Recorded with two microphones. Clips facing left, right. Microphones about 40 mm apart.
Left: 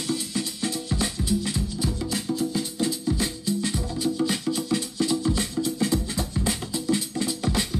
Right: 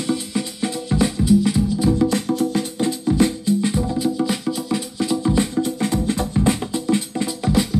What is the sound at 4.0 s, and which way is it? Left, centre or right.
Music, centre.